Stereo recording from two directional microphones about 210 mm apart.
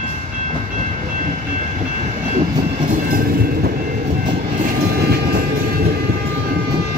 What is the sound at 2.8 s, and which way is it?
Train, 45° right (ahead or behind).